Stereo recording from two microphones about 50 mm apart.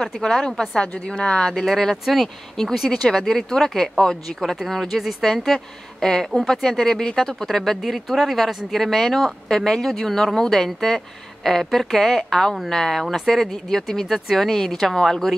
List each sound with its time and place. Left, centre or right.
0.0 s speech: centre
1.5 s speech: centre